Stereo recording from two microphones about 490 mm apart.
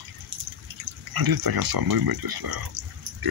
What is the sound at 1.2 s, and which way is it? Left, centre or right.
Speech, right.